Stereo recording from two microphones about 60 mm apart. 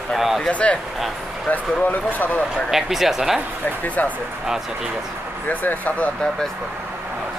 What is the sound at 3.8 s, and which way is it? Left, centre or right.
Speech, left.